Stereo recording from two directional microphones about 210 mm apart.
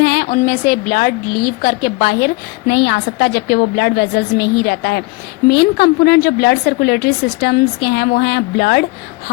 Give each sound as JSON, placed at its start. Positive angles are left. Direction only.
{"t": 0.0, "sound": "a woman's voice", "side_deg": 45}